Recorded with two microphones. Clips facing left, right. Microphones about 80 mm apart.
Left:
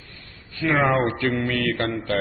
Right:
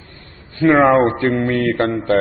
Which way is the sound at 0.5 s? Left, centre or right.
Right.